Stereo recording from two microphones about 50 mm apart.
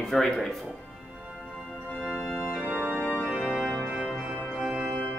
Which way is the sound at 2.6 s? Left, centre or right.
Right.